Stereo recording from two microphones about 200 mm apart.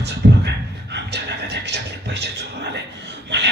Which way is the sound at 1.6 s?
60° right (ahead or behind).